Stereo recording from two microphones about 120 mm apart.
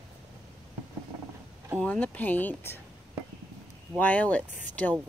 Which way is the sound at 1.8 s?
15° left (ahead or behind).